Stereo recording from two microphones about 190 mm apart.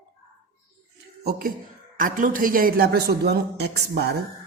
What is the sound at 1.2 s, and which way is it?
A man's voice, 50° right (ahead or behind).